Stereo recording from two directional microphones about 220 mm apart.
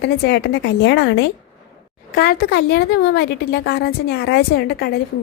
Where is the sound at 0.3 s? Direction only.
50° left (ahead or behind).